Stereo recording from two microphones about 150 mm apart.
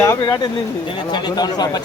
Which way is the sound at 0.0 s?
25° left (ahead or behind).